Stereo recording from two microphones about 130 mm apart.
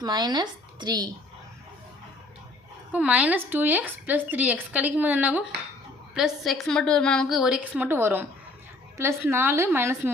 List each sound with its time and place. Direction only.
0.0 s speech: 30° right (ahead or behind)
2.9 s speech: 10° right (ahead or behind)
6.1 s a woman's voice: centre (ahead or behind); by 10.1 s 20° right (ahead or behind)